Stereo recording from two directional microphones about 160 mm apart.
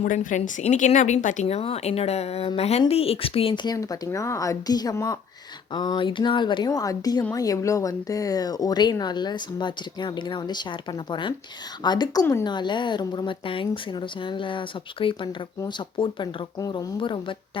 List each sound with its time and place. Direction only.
0.0 s a woman's voice: 55° left (ahead or behind); by 17.3 s 30° left (ahead or behind)